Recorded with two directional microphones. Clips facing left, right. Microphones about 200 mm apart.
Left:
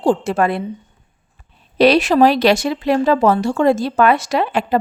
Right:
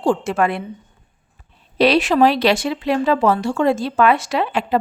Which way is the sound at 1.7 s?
45° left (ahead or behind).